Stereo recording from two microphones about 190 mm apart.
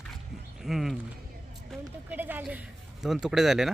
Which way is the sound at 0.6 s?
Centre (ahead or behind).